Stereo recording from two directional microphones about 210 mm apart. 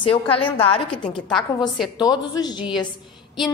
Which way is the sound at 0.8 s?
5° left (ahead or behind).